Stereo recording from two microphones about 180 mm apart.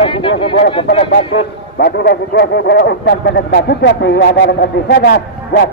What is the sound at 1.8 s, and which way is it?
Speech, 60° left (ahead or behind).